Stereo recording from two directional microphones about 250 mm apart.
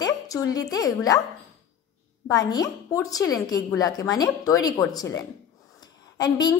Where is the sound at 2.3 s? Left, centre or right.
Centre.